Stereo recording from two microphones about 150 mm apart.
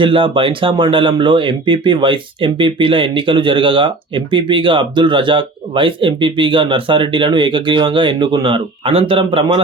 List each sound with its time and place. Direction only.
0.0 s speech: 35° right (ahead or behind)